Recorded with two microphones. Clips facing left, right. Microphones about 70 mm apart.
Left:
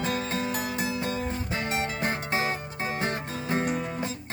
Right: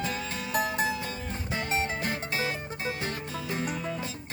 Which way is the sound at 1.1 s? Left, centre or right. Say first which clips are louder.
Left 5 dB; left.